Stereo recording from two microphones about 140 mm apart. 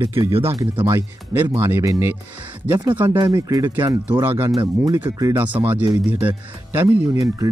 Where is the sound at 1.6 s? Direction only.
20° right (ahead or behind).